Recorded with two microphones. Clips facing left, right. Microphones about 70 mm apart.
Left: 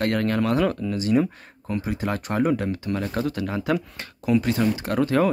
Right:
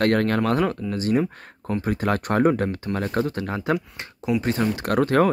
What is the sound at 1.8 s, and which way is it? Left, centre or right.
Speech, right.